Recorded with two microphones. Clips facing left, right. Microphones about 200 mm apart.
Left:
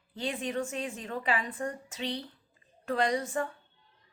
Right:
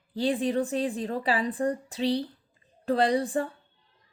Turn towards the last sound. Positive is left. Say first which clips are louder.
# right 5 dB
turn(degrees=-30)  # may be behind; listen again after turning